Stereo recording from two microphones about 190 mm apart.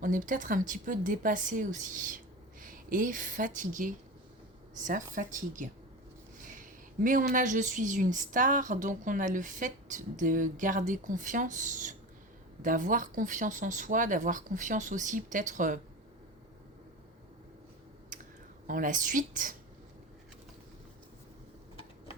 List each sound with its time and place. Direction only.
0.0 s speech: 45° right (ahead or behind)
18.1 s a sound: 40° right (ahead or behind)
18.7 s speech: 45° right (ahead or behind)